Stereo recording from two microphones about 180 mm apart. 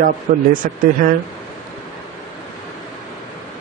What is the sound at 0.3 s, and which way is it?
Speech, 45° right (ahead or behind).